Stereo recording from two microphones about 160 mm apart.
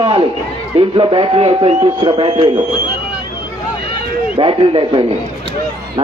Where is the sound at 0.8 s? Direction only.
35° right (ahead or behind).